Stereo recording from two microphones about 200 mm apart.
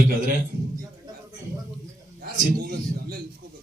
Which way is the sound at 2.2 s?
50° right (ahead or behind).